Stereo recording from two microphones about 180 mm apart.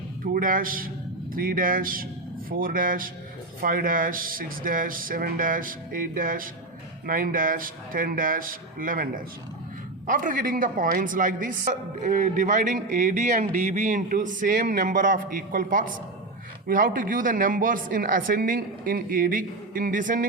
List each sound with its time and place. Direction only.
0.3 s a man's voice: 50° right (ahead or behind)